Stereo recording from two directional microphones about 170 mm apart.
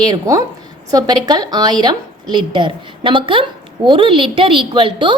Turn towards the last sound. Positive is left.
turn(degrees=-30)  # may be behind; listen again after turning